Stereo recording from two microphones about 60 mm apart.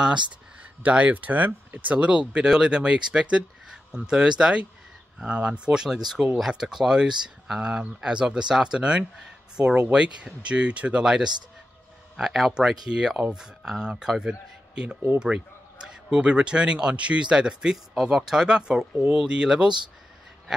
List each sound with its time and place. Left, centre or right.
0.8 s speech: right